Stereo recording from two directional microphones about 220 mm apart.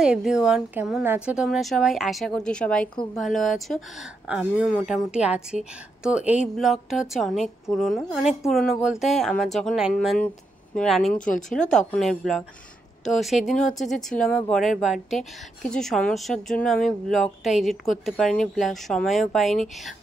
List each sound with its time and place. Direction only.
0.0 s a woman's voice: 5° right (ahead or behind)